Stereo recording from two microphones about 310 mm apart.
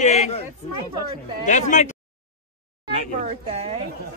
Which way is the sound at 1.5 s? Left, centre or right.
Left.